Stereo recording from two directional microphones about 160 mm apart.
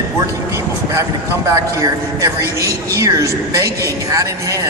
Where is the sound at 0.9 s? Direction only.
20° right (ahead or behind).